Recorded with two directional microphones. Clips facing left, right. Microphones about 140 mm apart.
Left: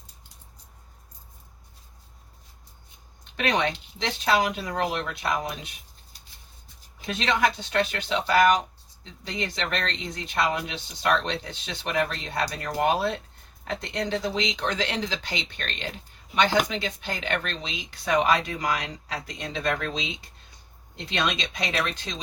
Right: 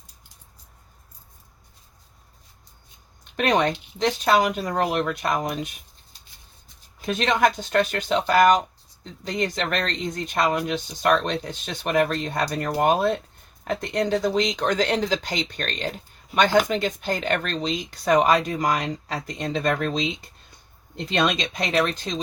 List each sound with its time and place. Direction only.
3.3 s speech: 45° right (ahead or behind)
7.0 s speech: 45° right (ahead or behind)
20.9 s speech: 45° right (ahead or behind)